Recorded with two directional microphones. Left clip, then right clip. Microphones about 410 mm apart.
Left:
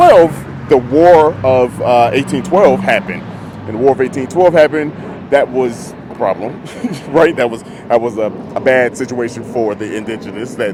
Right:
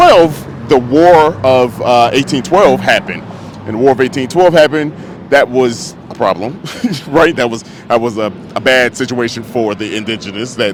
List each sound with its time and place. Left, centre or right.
0.0 s vehicle: right
0.7 s a man's voice: right